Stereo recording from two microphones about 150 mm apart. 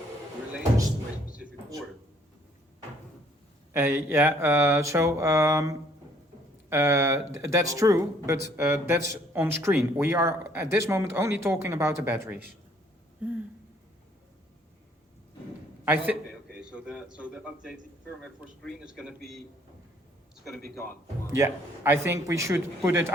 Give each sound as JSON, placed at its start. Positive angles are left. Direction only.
{"t": 1.4, "sound": "a sound", "side_deg": 0}
{"t": 3.7, "sound": "speech", "side_deg": -15}
{"t": 15.8, "sound": "a man's voice", "side_deg": -10}
{"t": 16.2, "sound": "a sound", "side_deg": -5}
{"t": 18.6, "sound": "a man's voice", "side_deg": -5}
{"t": 21.2, "sound": "speech", "side_deg": -20}